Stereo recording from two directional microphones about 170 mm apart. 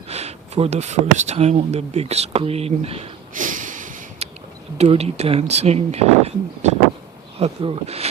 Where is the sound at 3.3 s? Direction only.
50° right (ahead or behind).